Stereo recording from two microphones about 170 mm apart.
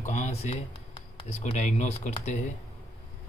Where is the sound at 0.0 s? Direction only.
40° left (ahead or behind).